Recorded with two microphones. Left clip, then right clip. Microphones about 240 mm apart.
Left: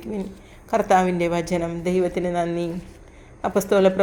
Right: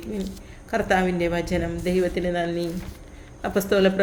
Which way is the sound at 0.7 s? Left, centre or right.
Centre.